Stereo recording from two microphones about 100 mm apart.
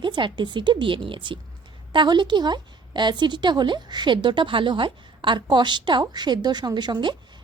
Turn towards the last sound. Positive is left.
turn(degrees=-50)  # may be behind; listen again after turning